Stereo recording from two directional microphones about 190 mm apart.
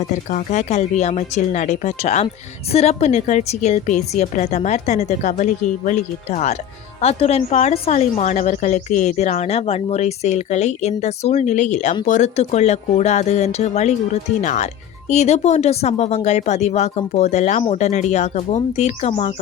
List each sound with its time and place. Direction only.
0.3 s a woman's voice: 40° left (ahead or behind)